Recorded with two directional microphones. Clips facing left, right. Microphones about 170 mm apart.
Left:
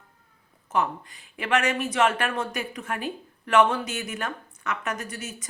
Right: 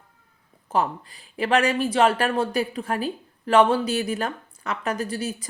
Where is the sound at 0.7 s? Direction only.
30° right (ahead or behind).